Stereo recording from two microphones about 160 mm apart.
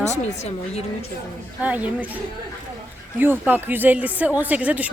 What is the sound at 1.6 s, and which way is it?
Speech, 10° right (ahead or behind).